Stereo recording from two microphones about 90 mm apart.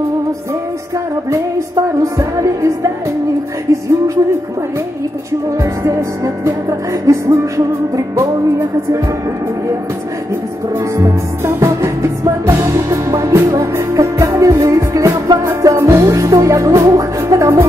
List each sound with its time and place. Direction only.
2.0 s music: 35° right (ahead or behind)
5.6 s music: 35° right (ahead or behind)
11.0 s music: 35° right (ahead or behind)